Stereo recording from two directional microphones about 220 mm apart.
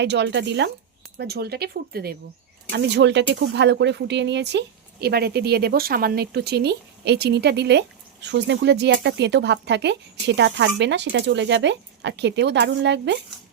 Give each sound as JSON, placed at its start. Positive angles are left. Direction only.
{"t": 0.0, "sound": "speech", "side_deg": -50}